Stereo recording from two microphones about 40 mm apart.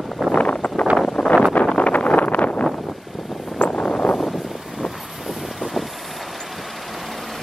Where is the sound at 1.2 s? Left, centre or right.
Centre.